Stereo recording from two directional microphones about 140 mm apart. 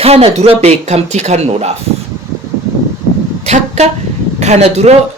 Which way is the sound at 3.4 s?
55° right (ahead or behind).